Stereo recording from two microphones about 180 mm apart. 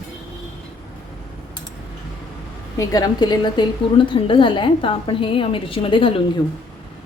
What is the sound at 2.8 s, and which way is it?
A woman's voice, 20° left (ahead or behind).